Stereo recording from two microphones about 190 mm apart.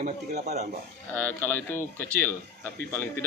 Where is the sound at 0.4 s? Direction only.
35° right (ahead or behind).